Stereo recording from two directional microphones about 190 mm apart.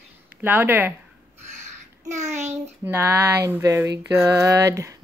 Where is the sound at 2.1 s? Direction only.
35° right (ahead or behind).